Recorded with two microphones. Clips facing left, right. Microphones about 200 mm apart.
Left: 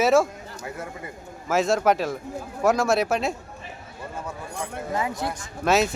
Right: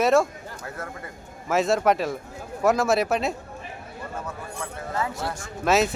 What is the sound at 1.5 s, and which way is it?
Speech, centre (ahead or behind).